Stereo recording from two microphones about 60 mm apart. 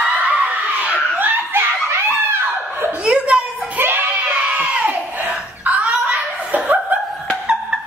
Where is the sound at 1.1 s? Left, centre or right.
Right.